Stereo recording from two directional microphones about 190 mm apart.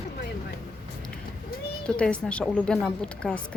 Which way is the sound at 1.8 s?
5° left (ahead or behind).